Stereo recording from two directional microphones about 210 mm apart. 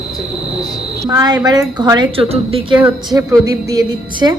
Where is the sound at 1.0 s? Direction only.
15° right (ahead or behind).